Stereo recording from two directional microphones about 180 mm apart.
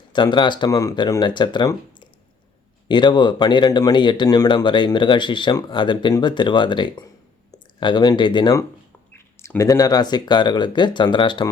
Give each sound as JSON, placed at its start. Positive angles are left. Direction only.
{"t": 0.1, "sound": "speech", "side_deg": 25}